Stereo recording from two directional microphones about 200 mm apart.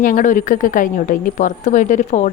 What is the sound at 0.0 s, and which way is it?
A woman's voice, 40° left (ahead or behind).